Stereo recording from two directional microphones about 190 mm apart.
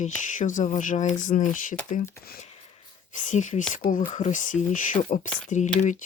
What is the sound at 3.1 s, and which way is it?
Speech, 40° left (ahead or behind).